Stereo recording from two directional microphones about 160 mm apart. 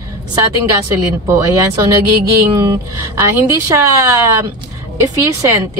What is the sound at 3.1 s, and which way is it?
Speech, 20° right (ahead or behind).